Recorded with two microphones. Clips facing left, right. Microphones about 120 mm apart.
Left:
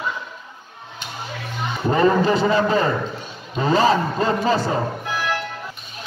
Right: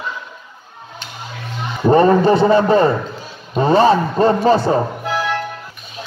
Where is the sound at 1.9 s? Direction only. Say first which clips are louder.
Right 6 dB; 35° right (ahead or behind).